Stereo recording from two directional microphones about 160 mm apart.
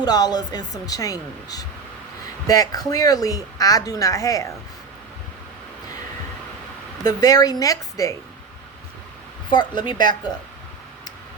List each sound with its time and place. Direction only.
0.0 s a woman's voice: 25° left (ahead or behind)
7.0 s a woman's voice: 25° left (ahead or behind)
9.5 s a woman's voice: 30° left (ahead or behind)